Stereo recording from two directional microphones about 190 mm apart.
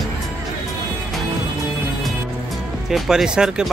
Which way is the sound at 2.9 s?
Centre (ahead or behind).